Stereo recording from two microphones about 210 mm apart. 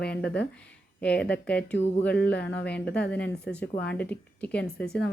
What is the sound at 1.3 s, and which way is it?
Speech, 5° left (ahead or behind).